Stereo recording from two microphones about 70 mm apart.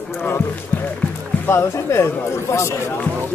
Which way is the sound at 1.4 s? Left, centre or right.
Left.